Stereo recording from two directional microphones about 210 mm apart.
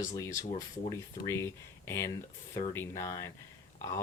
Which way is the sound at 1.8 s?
10° left (ahead or behind).